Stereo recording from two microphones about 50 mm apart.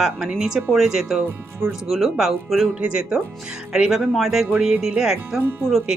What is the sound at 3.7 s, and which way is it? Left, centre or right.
Speech, centre.